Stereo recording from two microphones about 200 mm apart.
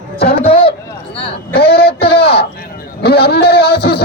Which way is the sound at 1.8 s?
30° left (ahead or behind).